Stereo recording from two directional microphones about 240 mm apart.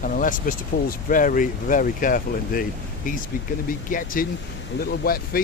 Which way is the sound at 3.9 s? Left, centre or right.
Left.